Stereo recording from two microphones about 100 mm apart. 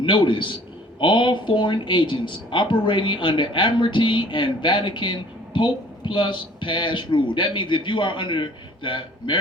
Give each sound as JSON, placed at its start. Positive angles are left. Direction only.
{"t": 0.0, "sound": "a man's voice", "side_deg": 55}